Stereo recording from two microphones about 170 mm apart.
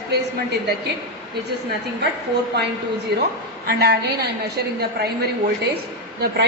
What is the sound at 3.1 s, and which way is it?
A woman's voice, 70° right (ahead or behind).